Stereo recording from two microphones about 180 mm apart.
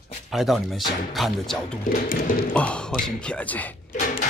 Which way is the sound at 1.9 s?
50° left (ahead or behind).